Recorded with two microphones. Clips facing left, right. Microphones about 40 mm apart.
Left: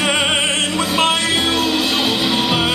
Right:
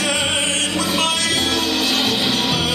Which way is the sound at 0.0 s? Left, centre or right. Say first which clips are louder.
Left 3 dB; centre.